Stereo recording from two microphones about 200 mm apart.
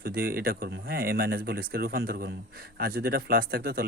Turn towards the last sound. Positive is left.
turn(degrees=-50)  # may be behind; listen again after turning